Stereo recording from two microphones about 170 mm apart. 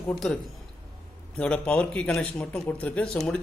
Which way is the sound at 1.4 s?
5° left (ahead or behind).